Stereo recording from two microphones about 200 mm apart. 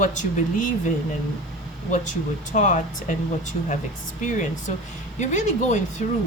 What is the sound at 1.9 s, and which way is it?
Speech, 35° left (ahead or behind).